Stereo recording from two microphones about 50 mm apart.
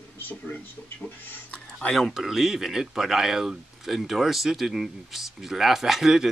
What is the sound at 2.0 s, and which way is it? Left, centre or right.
Speech, centre.